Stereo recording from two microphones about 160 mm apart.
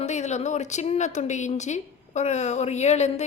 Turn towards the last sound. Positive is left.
turn(degrees=45)  # may be behind; listen again after turning